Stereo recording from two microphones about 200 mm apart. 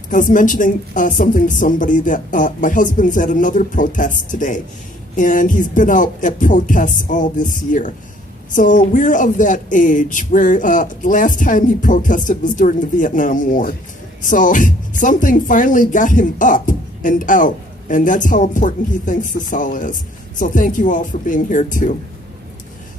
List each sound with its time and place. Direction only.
0.1 s speech: 40° left (ahead or behind)